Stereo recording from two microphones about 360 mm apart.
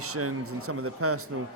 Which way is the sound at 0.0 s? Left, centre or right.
Right.